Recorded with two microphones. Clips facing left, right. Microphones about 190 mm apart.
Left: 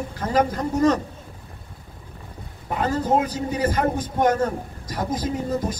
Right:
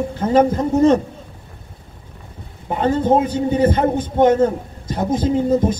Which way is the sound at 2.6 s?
25° right (ahead or behind).